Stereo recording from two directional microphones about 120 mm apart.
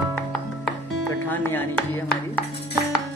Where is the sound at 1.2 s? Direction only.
15° left (ahead or behind).